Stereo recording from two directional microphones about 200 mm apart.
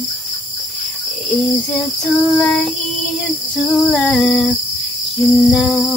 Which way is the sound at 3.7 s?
Centre (ahead or behind).